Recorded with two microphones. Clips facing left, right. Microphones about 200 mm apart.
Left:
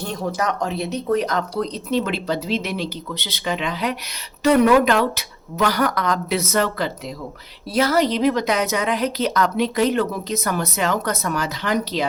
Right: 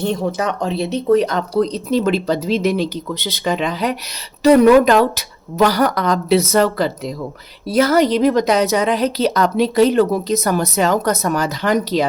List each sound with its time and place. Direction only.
0.0 s speech: 25° right (ahead or behind); by 12.0 s 45° right (ahead or behind)